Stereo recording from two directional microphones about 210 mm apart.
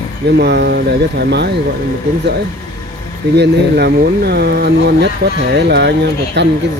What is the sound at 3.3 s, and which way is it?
Speech, 50° right (ahead or behind).